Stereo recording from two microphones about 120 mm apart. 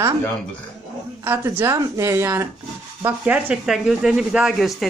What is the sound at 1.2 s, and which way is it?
Speech, 20° right (ahead or behind).